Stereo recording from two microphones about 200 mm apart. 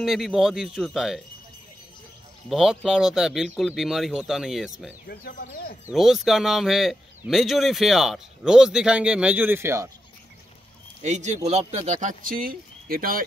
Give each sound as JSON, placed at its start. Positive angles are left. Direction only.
{"t": 0.0, "sound": "a man's voice", "side_deg": 0}
{"t": 2.5, "sound": "a man's voice", "side_deg": -5}
{"t": 5.0, "sound": "speech", "side_deg": 50}
{"t": 5.9, "sound": "a man's voice", "side_deg": 0}
{"t": 11.0, "sound": "speech", "side_deg": -35}